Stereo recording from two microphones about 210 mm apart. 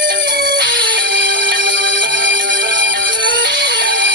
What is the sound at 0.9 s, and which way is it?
Music, 60° right (ahead or behind).